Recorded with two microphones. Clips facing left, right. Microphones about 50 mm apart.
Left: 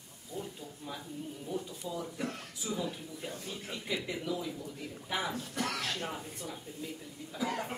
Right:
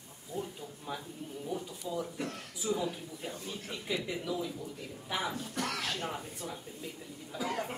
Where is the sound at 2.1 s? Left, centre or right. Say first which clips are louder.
Even; centre.